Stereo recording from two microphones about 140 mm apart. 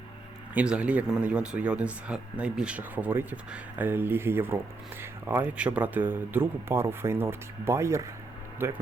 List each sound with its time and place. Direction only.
0.5 s speech: 5° right (ahead or behind)